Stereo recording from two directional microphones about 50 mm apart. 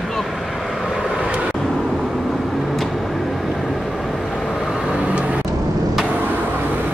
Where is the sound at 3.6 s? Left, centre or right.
Centre.